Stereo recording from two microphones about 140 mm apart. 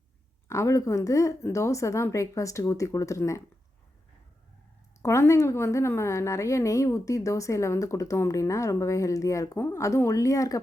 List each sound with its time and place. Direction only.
0.4 s a woman's voice: 20° left (ahead or behind)
5.0 s a woman's voice: 20° left (ahead or behind)